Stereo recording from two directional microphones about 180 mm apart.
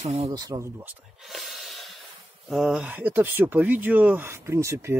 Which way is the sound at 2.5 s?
5° right (ahead or behind).